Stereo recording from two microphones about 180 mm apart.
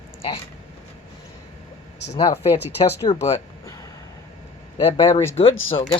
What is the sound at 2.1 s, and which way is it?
Speech, 25° left (ahead or behind).